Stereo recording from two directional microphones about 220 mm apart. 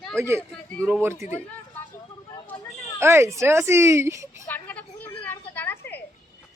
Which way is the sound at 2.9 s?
10° right (ahead or behind).